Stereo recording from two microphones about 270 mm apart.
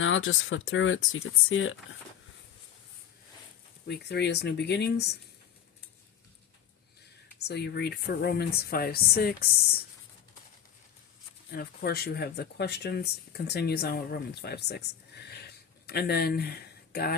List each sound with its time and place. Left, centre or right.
0.0 s speech: left
3.8 s speech: left
7.3 s speech: left
11.5 s speech: left